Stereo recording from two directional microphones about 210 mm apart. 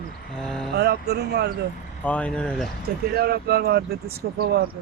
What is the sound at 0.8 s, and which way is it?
Speech, 50° right (ahead or behind).